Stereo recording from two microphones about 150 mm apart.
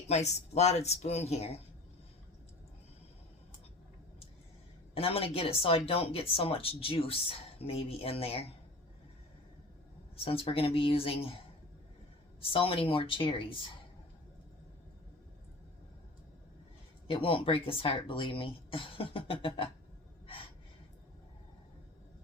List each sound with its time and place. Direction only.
0.1 s speech: 45° left (ahead or behind)
4.9 s speech: 40° left (ahead or behind)
10.2 s speech: 40° left (ahead or behind)
12.4 s speech: 40° left (ahead or behind)
17.1 s speech: 40° left (ahead or behind)